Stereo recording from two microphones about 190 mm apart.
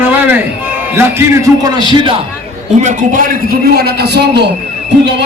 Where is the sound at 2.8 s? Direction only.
45° right (ahead or behind).